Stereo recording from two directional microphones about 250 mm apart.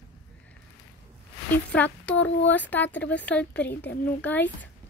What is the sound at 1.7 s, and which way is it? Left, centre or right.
Speech, centre.